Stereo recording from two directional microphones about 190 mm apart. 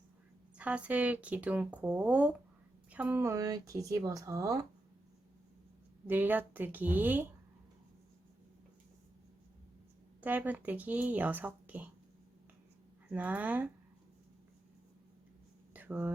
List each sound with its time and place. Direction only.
0.5 s speech: 5° right (ahead or behind)
6.1 s speech: 10° right (ahead or behind)
10.2 s speech: 10° right (ahead or behind)
13.1 s speech: 10° right (ahead or behind)
15.7 s a sound: 10° right (ahead or behind)